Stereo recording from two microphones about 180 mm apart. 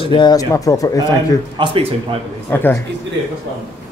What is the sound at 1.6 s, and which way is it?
Speech, 30° right (ahead or behind).